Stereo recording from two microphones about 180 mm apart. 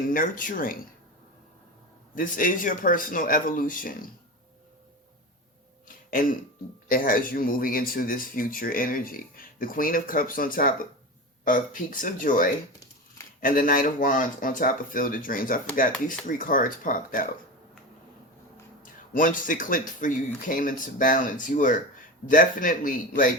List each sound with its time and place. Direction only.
0.1 s speech: 50° left (ahead or behind)
2.1 s speech: 45° left (ahead or behind)
6.1 s speech: 50° left (ahead or behind)
19.1 s speech: 45° left (ahead or behind)